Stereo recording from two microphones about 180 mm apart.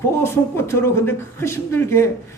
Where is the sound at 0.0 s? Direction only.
15° left (ahead or behind).